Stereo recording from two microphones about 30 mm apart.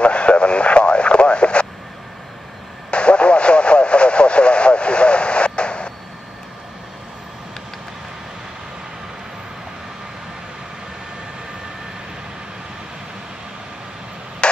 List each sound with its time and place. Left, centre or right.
0.0 s radio: left
2.9 s vehicle: left
14.4 s a sound: left